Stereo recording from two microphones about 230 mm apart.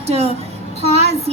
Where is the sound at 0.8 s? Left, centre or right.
Right.